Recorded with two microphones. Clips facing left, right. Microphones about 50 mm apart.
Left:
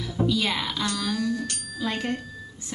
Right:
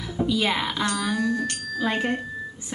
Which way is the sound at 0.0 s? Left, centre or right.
Centre.